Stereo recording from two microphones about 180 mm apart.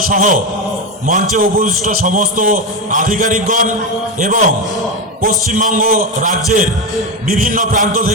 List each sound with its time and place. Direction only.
0.1 s a man's voice: 45° right (ahead or behind)